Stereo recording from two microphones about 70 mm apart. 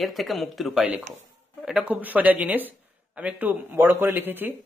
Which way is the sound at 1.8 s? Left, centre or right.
Right.